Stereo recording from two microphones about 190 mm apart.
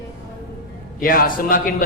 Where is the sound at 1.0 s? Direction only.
50° left (ahead or behind).